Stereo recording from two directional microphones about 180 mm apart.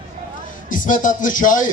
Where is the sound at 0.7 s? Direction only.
45° left (ahead or behind).